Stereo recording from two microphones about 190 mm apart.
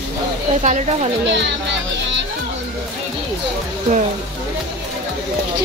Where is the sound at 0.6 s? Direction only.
35° right (ahead or behind).